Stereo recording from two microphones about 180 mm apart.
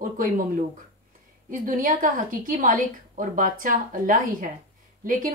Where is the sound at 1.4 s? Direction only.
50° right (ahead or behind).